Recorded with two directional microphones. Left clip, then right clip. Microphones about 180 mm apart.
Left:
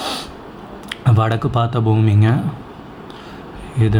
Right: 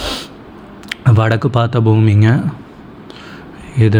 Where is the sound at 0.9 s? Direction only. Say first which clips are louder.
Right 3 dB; 20° right (ahead or behind).